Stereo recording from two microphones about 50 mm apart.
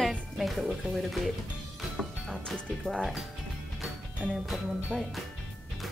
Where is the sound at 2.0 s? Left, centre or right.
Right.